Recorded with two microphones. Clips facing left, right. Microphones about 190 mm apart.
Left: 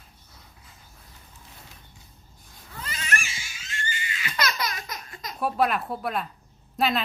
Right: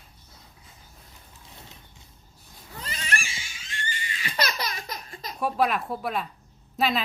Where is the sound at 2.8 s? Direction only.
30° right (ahead or behind).